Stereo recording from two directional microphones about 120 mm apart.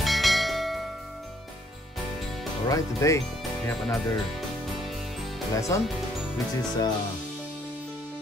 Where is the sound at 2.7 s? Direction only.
25° left (ahead or behind).